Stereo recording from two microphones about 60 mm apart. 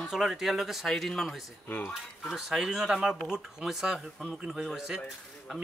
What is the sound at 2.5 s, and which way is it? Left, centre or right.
Speech, centre.